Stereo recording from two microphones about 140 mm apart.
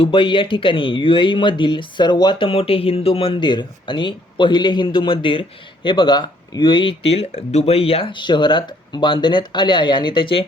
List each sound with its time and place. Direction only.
0.0 s speech: 40° left (ahead or behind)